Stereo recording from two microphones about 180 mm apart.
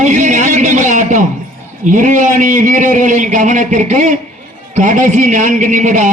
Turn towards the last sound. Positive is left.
turn(degrees=-45)  # may be behind; listen again after turning